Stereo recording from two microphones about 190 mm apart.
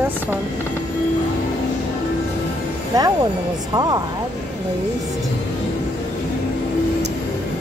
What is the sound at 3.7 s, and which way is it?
Speech, 20° right (ahead or behind).